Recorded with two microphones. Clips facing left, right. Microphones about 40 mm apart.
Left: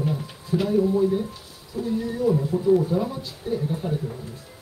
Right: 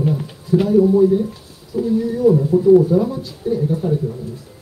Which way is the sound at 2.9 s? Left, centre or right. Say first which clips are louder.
Right 8 dB; centre.